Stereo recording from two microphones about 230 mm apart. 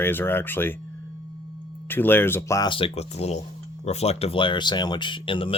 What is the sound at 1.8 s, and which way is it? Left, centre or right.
Speech, centre.